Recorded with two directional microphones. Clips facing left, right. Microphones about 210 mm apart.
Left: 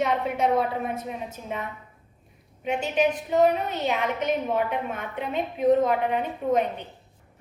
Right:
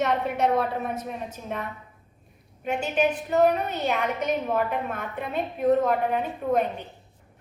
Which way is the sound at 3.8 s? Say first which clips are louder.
Left 1 dB; centre (ahead or behind).